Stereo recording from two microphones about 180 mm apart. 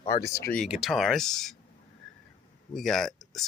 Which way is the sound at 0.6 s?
Centre (ahead or behind).